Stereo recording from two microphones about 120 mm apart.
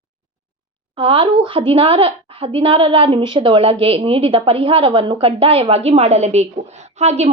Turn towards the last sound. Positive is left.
turn(degrees=-65)  # may be behind; listen again after turning